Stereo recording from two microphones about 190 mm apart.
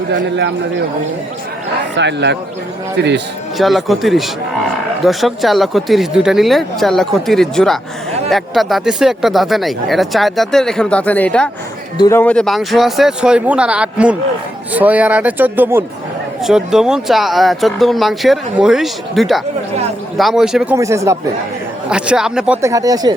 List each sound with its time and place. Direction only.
0.1 s speech: 65° right (ahead or behind)
2.0 s speech: 65° right (ahead or behind)
3.6 s speech: centre (ahead or behind)
11.9 s speech: 15° left (ahead or behind); by 20.7 s 5° right (ahead or behind)
20.7 s speech: 15° right (ahead or behind)
21.8 s speech: 5° right (ahead or behind)
22.6 s speech: 15° right (ahead or behind)